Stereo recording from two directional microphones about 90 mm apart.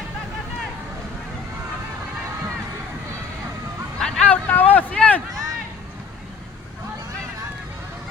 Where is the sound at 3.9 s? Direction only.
10° left (ahead or behind).